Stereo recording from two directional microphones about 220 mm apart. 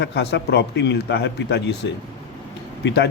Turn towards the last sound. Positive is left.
turn(degrees=50)  # may be behind; listen again after turning